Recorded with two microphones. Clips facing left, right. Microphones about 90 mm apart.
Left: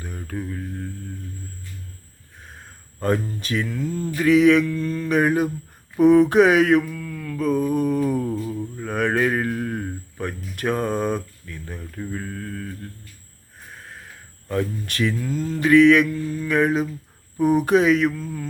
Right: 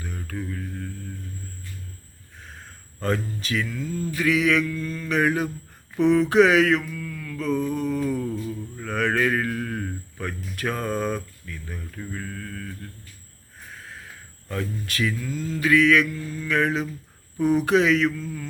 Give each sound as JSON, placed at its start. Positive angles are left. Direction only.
{"t": 0.0, "sound": "mantra", "side_deg": 15}
{"t": 0.3, "sound": "speech", "side_deg": 20}
{"t": 3.2, "sound": "speech", "side_deg": 30}
{"t": 6.0, "sound": "a sound", "side_deg": 15}
{"t": 6.6, "sound": "speech", "side_deg": 20}
{"t": 7.3, "sound": "speech", "side_deg": 15}
{"t": 11.4, "sound": "mantra", "side_deg": 30}
{"t": 14.4, "sound": "speech", "side_deg": 20}